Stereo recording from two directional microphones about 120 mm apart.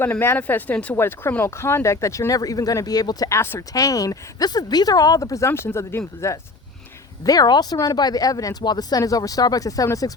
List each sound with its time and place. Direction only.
0.0 s speech: 20° left (ahead or behind)
7.3 s speech: 35° left (ahead or behind)